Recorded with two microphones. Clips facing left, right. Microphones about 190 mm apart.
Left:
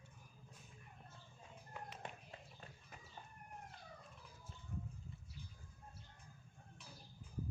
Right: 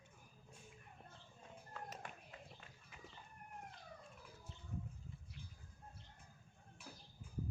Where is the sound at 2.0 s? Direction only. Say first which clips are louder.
Left 2 dB; 30° left (ahead or behind).